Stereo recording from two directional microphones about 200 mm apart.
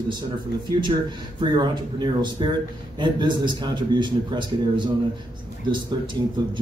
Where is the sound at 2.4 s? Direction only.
25° right (ahead or behind).